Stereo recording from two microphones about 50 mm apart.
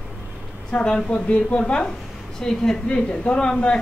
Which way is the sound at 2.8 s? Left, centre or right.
Left.